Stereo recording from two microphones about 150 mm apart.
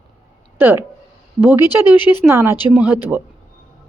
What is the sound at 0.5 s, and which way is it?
Speech, 15° right (ahead or behind).